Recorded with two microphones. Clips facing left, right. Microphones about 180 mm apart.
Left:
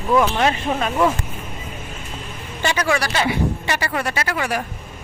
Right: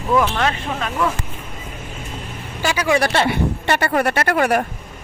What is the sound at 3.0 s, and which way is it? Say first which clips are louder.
Speech: right 3 dB; 55° right (ahead or behind).